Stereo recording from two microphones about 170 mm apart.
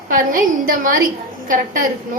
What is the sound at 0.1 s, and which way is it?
A woman's voice, 55° right (ahead or behind).